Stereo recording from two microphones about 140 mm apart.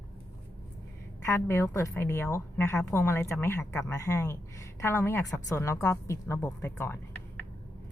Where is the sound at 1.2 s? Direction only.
20° left (ahead or behind).